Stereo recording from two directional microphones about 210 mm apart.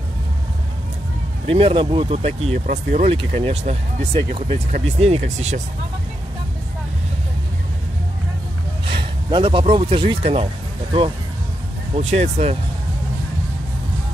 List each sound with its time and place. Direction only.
1.5 s speech: 25° right (ahead or behind)
8.8 s speech: 25° right (ahead or behind)